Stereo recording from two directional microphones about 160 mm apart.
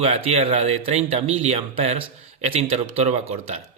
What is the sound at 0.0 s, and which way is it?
A man's voice, 40° right (ahead or behind).